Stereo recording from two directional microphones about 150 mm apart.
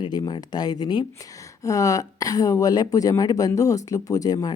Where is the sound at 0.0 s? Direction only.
30° left (ahead or behind).